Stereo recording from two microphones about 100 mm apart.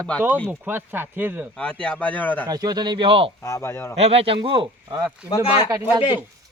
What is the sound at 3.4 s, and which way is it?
Speech, 30° left (ahead or behind).